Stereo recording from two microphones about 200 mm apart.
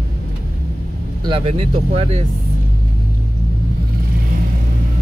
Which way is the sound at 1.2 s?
25° right (ahead or behind).